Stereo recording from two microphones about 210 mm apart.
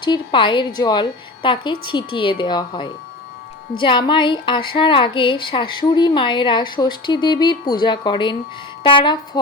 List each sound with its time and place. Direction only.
0.0 s speech: 20° left (ahead or behind)